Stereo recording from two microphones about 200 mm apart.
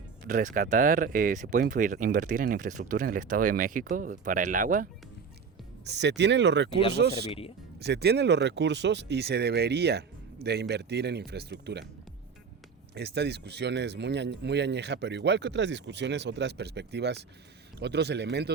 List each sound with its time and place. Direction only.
0.3 s speech: 40° right (ahead or behind)
5.8 s speech: 60° right (ahead or behind)
7.3 s speech: 30° left (ahead or behind)
7.8 s speech: 55° right (ahead or behind)
12.9 s speech: 55° right (ahead or behind)